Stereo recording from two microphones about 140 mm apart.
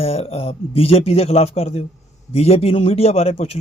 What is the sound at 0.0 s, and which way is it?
A man's voice, 45° left (ahead or behind).